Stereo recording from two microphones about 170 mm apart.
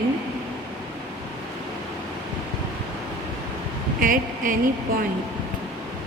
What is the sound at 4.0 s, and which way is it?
Speech, 55° right (ahead or behind).